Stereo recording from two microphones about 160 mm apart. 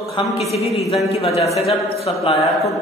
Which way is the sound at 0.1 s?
40° left (ahead or behind).